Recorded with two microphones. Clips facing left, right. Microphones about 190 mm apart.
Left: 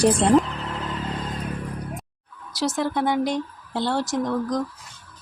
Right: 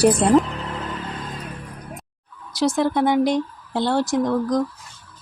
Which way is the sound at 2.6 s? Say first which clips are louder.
Right 4 dB; 15° right (ahead or behind).